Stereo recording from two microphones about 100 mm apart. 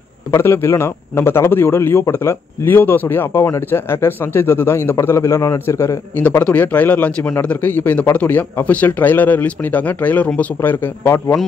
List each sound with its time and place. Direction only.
0.3 s a man's voice: 25° left (ahead or behind)
6.4 s speech: 15° left (ahead or behind)